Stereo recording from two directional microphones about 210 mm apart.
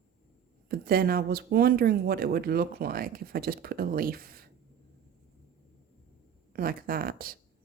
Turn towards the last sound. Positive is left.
turn(degrees=-45)  # may be behind; listen again after turning